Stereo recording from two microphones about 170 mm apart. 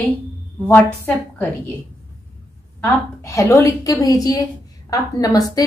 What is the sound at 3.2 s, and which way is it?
A woman's voice, 20° left (ahead or behind).